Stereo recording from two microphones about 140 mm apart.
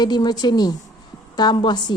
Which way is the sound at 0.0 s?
30° left (ahead or behind).